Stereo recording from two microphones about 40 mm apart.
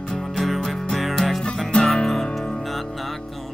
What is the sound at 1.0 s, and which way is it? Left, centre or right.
Speech, centre.